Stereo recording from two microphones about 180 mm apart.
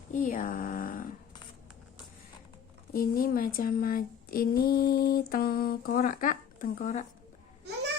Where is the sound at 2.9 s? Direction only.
50° left (ahead or behind).